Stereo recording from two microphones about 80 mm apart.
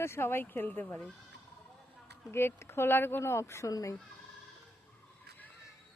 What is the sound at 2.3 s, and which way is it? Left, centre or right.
Speech, left.